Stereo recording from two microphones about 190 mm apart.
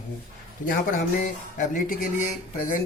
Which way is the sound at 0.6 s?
45° left (ahead or behind).